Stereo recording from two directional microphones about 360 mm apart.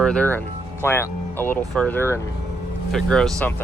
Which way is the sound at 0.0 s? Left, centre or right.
Centre.